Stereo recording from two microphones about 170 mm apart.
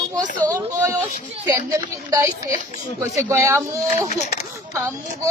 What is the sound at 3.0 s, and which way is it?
Speech, 15° right (ahead or behind).